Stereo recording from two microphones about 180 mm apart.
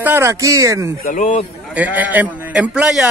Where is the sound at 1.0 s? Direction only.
45° left (ahead or behind).